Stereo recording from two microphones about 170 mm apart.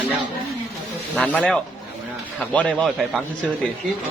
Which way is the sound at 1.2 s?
5° left (ahead or behind).